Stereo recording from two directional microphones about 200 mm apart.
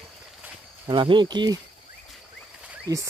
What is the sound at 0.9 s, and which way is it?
Speech, 25° right (ahead or behind).